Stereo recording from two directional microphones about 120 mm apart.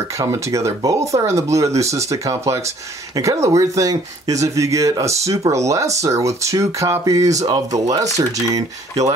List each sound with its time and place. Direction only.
0.1 s speech: 25° right (ahead or behind)